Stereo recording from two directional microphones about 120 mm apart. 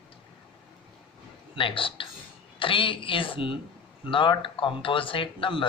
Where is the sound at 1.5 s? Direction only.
45° left (ahead or behind).